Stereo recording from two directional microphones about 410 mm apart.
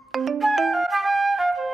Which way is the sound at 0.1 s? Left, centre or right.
Centre.